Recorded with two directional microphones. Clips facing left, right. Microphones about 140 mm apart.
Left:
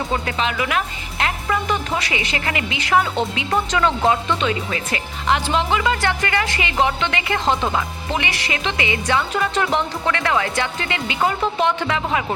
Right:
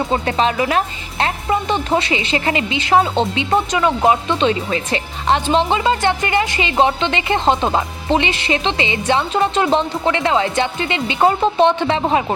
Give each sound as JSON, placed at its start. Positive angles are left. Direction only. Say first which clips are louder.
{"t": 0.0, "sound": "a woman's voice", "louder": "right 5 dB", "side_deg": -30}